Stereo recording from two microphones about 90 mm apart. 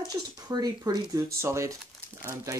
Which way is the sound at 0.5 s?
45° right (ahead or behind).